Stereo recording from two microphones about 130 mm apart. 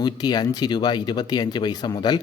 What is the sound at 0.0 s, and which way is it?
Speech, 30° left (ahead or behind).